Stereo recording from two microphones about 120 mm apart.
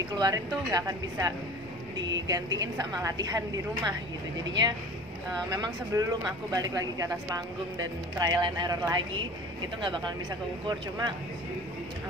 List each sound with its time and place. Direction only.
0.1 s a woman's voice: 35° right (ahead or behind)
10.7 s a woman's voice: 35° right (ahead or behind)